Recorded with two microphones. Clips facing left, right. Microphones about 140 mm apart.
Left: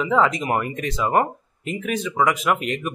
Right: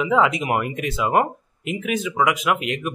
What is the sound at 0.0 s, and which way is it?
Speech, 5° right (ahead or behind).